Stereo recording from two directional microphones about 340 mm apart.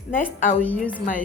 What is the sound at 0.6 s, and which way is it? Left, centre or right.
Speech, centre.